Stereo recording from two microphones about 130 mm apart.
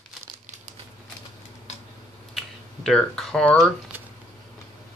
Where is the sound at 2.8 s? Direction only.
Centre (ahead or behind).